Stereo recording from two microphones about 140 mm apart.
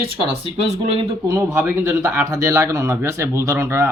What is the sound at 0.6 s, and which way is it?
Speech, 45° right (ahead or behind).